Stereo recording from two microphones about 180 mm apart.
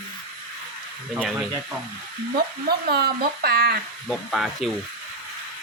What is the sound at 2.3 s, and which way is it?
Speech, 60° right (ahead or behind).